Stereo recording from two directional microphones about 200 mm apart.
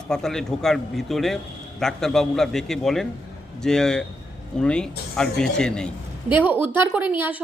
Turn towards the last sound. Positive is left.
turn(degrees=-10)  # may be behind; listen again after turning